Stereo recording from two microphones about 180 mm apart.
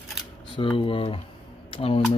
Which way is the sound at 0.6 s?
30° left (ahead or behind).